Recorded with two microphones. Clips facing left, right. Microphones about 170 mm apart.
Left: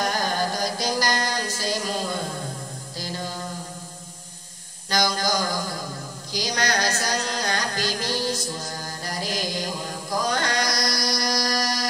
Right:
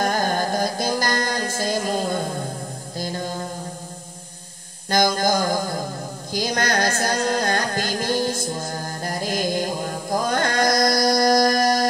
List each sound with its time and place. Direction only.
0.0 s music: 50° right (ahead or behind)
4.8 s mantra: 50° right (ahead or behind)
6.3 s music: 50° right (ahead or behind)